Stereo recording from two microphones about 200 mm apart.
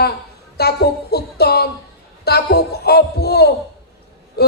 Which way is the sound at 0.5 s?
55° left (ahead or behind).